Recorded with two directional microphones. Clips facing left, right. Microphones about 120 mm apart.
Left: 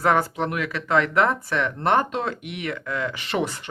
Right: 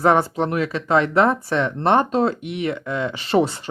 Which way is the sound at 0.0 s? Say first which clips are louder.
Right 4 dB; 25° right (ahead or behind).